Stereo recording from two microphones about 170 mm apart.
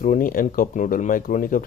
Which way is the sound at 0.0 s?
50° left (ahead or behind).